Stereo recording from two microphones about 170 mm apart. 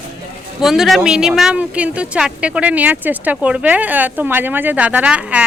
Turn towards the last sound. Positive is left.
turn(degrees=-5)  # may be behind; listen again after turning